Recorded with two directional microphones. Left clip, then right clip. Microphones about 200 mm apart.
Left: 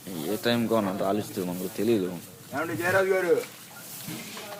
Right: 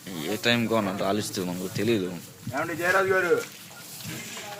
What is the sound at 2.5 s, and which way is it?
Speech, 35° right (ahead or behind).